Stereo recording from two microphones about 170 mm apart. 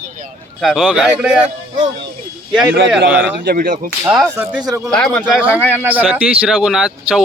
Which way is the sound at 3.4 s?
55° right (ahead or behind).